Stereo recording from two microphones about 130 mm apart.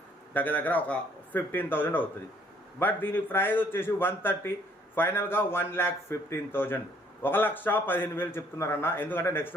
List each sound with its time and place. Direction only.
0.3 s a man's voice: 15° left (ahead or behind)